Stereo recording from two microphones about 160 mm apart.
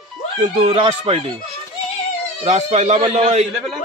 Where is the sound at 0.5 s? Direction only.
35° right (ahead or behind).